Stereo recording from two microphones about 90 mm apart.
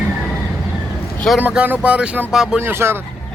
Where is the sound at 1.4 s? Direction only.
15° right (ahead or behind).